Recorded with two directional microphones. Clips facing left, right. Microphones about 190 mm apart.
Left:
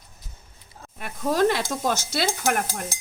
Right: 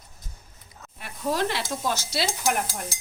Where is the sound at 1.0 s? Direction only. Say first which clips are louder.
Left 5 dB; 50° left (ahead or behind).